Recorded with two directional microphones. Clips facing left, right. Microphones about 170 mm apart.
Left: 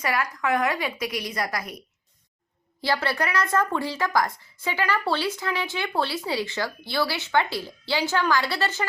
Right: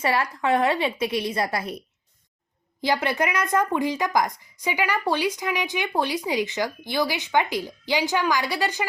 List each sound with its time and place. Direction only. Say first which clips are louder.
0.0 s a woman's voice: right 3 dB; 30° right (ahead or behind)
2.8 s speech: right 2 dB; 20° right (ahead or behind)